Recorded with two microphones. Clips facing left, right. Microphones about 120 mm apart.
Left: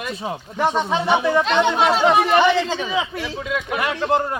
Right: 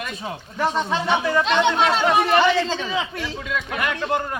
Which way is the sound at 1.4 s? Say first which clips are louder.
Left 1 dB; 5° left (ahead or behind).